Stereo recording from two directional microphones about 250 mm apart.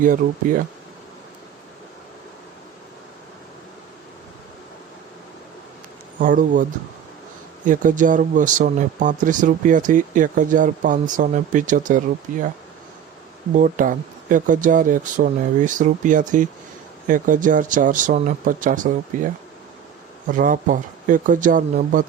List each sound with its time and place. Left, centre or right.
0.0 s speech: right
6.1 s speech: right
13.5 s speech: right